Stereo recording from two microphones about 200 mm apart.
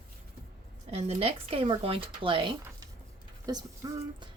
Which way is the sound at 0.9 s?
30° right (ahead or behind).